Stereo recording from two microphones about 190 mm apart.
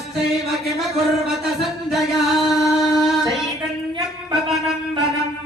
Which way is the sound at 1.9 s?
Centre (ahead or behind).